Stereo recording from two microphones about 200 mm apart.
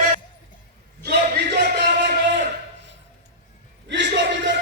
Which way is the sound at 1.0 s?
55° right (ahead or behind).